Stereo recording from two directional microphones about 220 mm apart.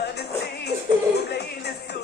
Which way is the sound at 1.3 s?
50° left (ahead or behind).